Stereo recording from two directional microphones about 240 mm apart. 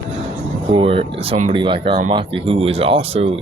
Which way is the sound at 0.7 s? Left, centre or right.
Right.